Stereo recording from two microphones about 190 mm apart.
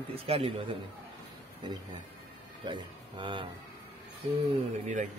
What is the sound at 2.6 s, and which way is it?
Speech, 25° right (ahead or behind).